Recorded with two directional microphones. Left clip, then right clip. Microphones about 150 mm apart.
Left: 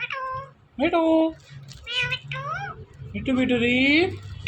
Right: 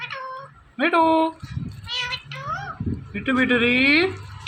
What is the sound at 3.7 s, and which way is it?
Speech, 90° right.